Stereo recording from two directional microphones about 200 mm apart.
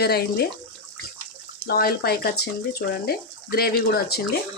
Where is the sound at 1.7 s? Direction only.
50° left (ahead or behind).